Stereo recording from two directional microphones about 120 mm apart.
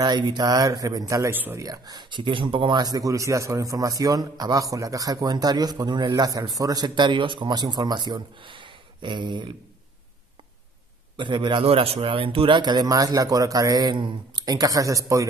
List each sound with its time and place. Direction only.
0.0 s speech: 35° right (ahead or behind)
1.3 s speech: 15° right (ahead or behind)
1.6 s speech: 30° right (ahead or behind)
11.1 s speech: 40° right (ahead or behind)